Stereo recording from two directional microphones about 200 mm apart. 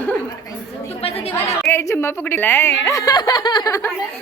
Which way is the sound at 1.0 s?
30° left (ahead or behind).